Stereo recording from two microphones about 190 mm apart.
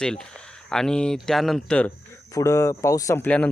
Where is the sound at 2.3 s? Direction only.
15° left (ahead or behind).